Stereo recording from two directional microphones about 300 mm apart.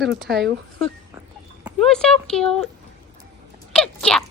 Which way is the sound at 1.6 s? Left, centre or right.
Centre.